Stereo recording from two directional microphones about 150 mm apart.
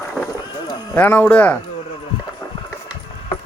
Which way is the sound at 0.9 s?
10° left (ahead or behind).